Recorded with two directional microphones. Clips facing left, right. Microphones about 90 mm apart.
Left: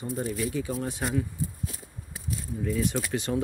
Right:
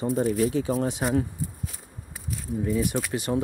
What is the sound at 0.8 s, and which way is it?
Speech, 20° right (ahead or behind).